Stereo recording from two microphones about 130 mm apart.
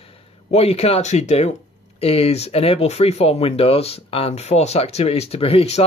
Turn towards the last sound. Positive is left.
turn(degrees=50)  # may be behind; listen again after turning